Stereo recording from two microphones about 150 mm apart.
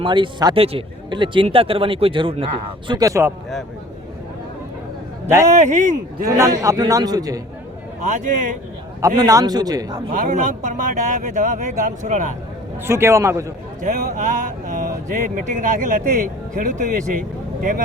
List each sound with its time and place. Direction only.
0.0 s speech: 35° right (ahead or behind)
5.5 s speech: 55° right (ahead or behind)
6.2 s a man's voice: 20° right (ahead or behind)
9.0 s a man's voice: 25° right (ahead or behind)
10.1 s speech: 60° right (ahead or behind)
12.8 s a man's voice: 15° right (ahead or behind)
13.8 s speech: 55° right (ahead or behind)